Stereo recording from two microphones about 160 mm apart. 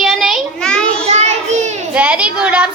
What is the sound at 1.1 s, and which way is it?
Child singing, 45° right (ahead or behind).